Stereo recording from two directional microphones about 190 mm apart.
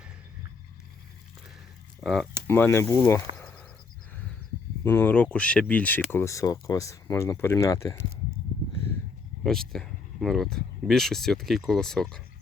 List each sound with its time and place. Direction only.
2.5 s speech: 10° left (ahead or behind)
3.3 s a sound: 5° left (ahead or behind)
4.8 s speech: 10° left (ahead or behind)
9.4 s speech: centre (ahead or behind)